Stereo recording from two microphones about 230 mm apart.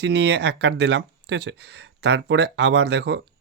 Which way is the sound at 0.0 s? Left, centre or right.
Right.